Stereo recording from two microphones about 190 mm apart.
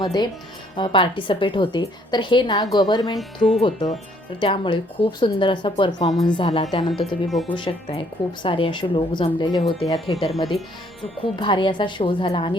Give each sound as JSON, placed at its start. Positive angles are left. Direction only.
{"t": 0.0, "sound": "speech", "side_deg": 20}
{"t": 3.2, "sound": "speech", "side_deg": 0}
{"t": 3.6, "sound": "speech", "side_deg": 30}
{"t": 10.3, "sound": "speech", "side_deg": 0}
{"t": 11.2, "sound": "speech", "side_deg": 25}